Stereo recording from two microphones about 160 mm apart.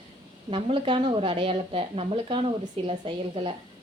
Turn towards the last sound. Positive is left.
turn(degrees=-35)  # may be behind; listen again after turning